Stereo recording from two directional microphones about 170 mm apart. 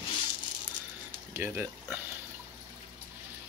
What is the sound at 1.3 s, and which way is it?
Speech, 15° right (ahead or behind).